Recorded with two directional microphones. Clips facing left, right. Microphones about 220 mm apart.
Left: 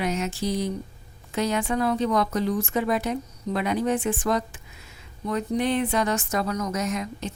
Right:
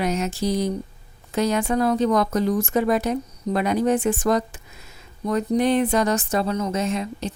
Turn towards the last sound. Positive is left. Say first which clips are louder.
# right 3 dB
turn(degrees=-30)  # may be behind; listen again after turning